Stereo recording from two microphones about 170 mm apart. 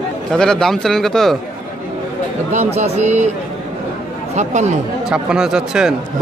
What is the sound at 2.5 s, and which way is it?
Speech, 40° right (ahead or behind).